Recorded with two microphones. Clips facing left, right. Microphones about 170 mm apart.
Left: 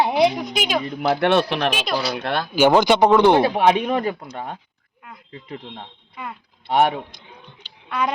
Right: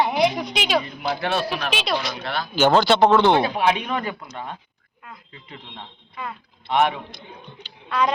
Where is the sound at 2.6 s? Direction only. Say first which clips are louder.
Left 1 dB; 15° left (ahead or behind).